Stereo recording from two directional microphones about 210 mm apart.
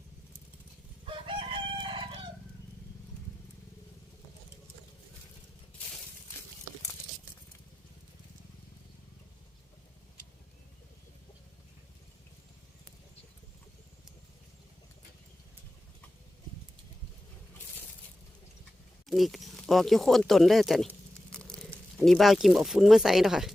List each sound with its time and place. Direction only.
1.0 s chicken: 25° right (ahead or behind)
19.0 s speech: centre (ahead or behind)
21.3 s a sound: 5° left (ahead or behind)
21.7 s speech: 5° right (ahead or behind)